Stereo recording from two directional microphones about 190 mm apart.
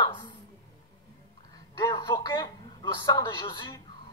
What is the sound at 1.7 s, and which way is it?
Speech, 20° left (ahead or behind).